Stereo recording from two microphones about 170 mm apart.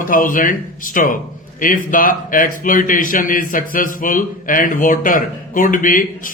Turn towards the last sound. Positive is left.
turn(degrees=50)  # may be behind; listen again after turning